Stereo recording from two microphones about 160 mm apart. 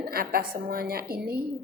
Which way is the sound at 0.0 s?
70° right (ahead or behind).